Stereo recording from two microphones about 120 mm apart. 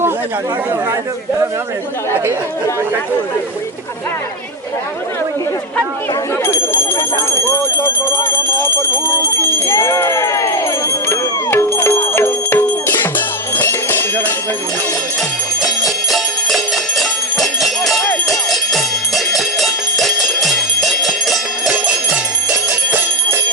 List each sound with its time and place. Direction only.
6.4 s speech: 20° left (ahead or behind)
11.1 s music: 20° left (ahead or behind)
16.0 s music: centre (ahead or behind)